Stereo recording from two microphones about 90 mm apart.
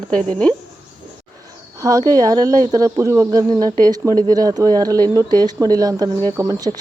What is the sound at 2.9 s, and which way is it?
Speech, 30° right (ahead or behind).